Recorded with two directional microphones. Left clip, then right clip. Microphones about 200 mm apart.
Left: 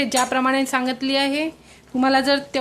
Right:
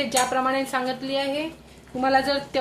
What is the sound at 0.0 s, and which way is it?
A woman's voice, 35° left (ahead or behind).